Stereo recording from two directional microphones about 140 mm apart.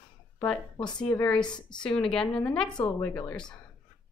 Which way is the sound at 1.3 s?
5° left (ahead or behind).